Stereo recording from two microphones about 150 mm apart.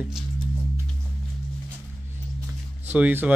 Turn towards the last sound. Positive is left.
turn(degrees=-10)  # may be behind; listen again after turning